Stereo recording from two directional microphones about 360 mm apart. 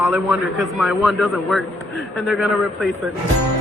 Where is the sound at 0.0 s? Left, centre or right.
Centre.